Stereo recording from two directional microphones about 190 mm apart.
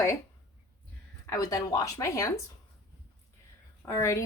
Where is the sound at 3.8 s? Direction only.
15° left (ahead or behind).